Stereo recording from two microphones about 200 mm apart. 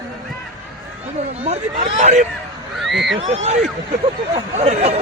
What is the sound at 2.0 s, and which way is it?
Speech, 35° right (ahead or behind).